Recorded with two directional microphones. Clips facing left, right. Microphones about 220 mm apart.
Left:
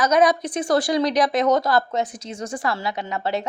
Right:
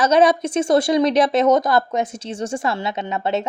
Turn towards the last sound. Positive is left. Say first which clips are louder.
# right 3 dB
turn(degrees=-20)  # may be behind; listen again after turning